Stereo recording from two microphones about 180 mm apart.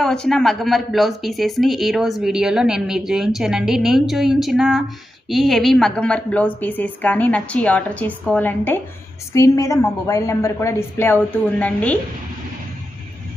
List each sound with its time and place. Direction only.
0.0 s a woman's voice: 5° left (ahead or behind)